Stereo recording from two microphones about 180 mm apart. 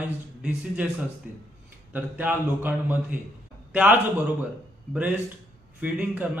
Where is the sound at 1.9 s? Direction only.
10° right (ahead or behind).